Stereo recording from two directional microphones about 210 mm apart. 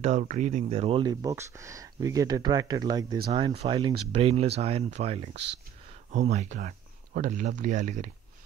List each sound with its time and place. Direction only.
0.0 s speech: 35° right (ahead or behind)